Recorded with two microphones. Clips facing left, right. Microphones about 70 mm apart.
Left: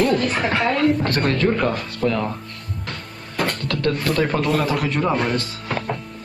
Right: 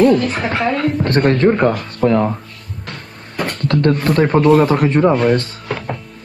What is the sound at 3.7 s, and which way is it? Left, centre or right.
Speech, right.